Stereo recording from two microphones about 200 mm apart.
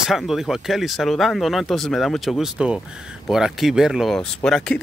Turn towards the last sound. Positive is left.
turn(degrees=5)  # may be behind; listen again after turning